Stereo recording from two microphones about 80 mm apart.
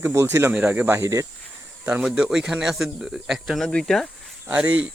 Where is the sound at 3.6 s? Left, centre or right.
Centre.